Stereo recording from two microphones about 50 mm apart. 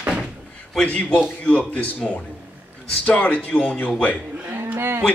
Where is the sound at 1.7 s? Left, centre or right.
Centre.